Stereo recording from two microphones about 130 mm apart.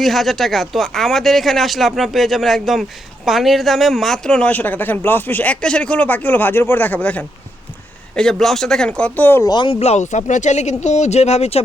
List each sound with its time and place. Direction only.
0.0 s speech: centre (ahead or behind); by 9.5 s 15° left (ahead or behind)
9.5 s speech: 35° left (ahead or behind)
9.7 s speech: 55° left (ahead or behind)